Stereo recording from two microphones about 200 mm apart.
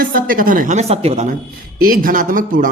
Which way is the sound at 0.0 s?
45° right (ahead or behind).